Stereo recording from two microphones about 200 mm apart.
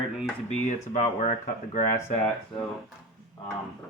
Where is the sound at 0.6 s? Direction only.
35° left (ahead or behind).